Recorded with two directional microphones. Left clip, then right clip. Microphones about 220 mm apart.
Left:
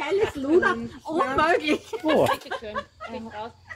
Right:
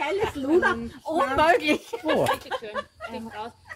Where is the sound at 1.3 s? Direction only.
55° right (ahead or behind).